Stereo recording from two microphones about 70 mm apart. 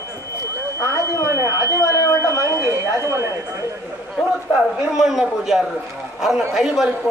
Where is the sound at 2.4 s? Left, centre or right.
Right.